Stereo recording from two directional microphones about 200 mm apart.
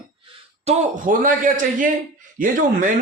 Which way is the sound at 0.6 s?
40° right (ahead or behind).